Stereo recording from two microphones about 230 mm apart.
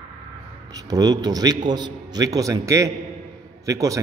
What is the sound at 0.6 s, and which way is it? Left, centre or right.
A man's voice, centre.